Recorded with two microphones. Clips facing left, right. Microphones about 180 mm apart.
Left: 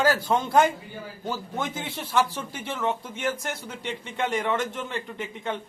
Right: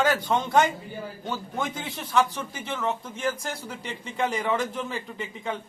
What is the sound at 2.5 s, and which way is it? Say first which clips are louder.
Speech: even; 25° left (ahead or behind).